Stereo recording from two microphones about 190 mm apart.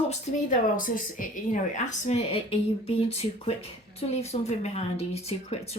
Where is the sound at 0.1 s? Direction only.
40° left (ahead or behind).